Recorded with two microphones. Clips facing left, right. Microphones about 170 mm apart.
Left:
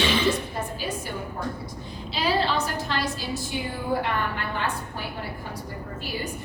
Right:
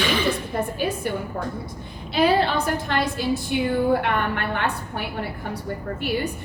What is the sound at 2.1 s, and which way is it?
A woman's voice, 55° right (ahead or behind).